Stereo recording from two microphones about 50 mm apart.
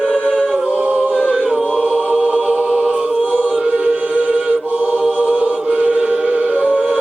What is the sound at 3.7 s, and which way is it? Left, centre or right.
Choir, right.